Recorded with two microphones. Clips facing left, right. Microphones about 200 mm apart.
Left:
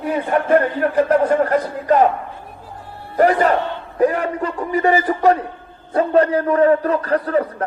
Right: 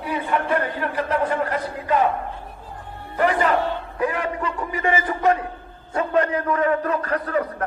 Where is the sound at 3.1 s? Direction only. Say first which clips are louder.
Left 5 dB; 40° left (ahead or behind).